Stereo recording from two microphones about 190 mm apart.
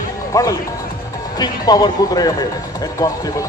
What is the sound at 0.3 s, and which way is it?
Speech, 20° left (ahead or behind).